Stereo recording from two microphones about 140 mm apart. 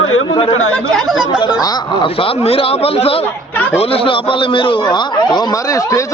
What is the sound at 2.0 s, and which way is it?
A man's voice, 40° left (ahead or behind).